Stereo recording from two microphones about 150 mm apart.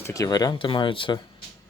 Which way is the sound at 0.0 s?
20° left (ahead or behind).